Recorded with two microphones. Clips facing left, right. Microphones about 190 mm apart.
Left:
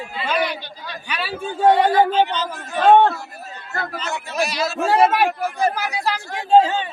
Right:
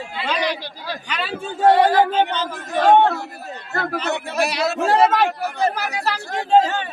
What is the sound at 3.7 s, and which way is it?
Speech, 60° right (ahead or behind).